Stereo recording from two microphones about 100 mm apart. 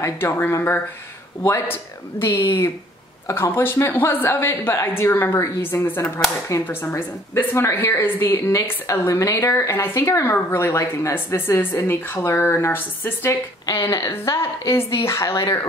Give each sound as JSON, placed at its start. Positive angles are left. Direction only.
{"t": 0.0, "sound": "speech", "side_deg": 25}
{"t": 13.7, "sound": "a woman's voice", "side_deg": 35}